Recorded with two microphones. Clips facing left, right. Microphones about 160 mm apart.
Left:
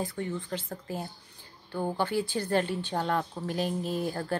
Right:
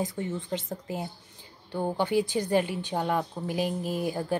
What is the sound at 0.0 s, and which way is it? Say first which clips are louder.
A woman's voice: right 2 dB; 20° right (ahead or behind).